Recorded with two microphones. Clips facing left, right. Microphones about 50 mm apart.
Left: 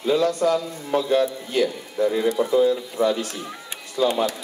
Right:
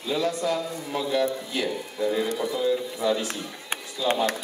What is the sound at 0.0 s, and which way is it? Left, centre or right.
Speech, left.